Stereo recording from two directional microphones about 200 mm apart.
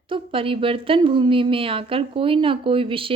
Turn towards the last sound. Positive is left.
turn(degrees=-25)  # may be behind; listen again after turning